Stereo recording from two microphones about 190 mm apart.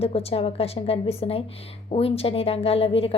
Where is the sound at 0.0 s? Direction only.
30° left (ahead or behind).